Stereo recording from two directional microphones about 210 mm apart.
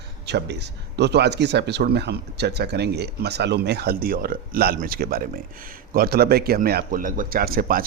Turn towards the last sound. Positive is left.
turn(degrees=-45)  # may be behind; listen again after turning